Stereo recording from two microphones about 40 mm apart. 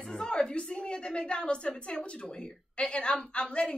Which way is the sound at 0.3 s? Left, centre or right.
Left.